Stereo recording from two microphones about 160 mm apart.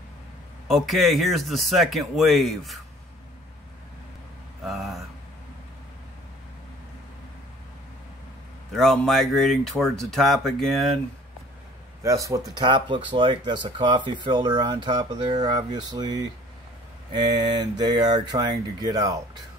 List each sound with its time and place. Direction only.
0.7 s speech: centre (ahead or behind)
4.6 s speech: centre (ahead or behind)
8.7 s speech: centre (ahead or behind)
12.0 s speech: 20° right (ahead or behind)